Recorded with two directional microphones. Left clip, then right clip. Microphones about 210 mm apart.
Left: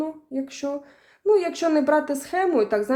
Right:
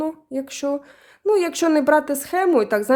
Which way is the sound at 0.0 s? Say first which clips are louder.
Right 3 dB; 35° right (ahead or behind).